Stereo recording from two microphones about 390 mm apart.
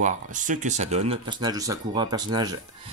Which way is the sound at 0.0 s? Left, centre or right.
Centre.